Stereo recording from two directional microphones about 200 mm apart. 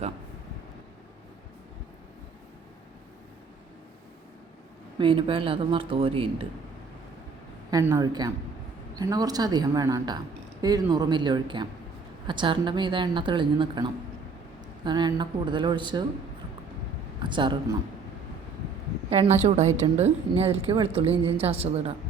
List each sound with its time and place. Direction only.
4.9 s speech: 25° right (ahead or behind)
7.7 s a woman's voice: 15° right (ahead or behind)
17.2 s speech: 25° right (ahead or behind)
19.1 s a woman's voice: 35° right (ahead or behind)